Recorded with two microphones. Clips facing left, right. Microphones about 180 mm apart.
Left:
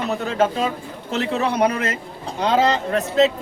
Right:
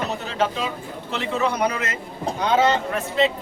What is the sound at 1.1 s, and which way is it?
Speech, 35° left (ahead or behind).